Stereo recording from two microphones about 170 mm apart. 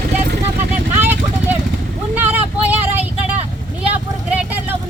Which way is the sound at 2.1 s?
10° right (ahead or behind).